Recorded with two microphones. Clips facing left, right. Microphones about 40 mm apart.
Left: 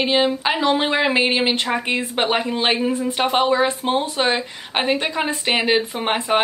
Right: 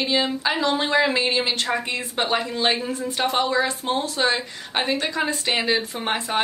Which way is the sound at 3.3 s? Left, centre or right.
Left.